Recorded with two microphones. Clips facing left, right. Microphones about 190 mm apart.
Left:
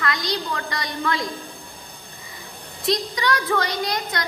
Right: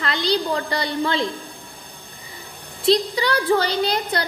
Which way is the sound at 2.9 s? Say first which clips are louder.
Right 4 dB; 30° right (ahead or behind).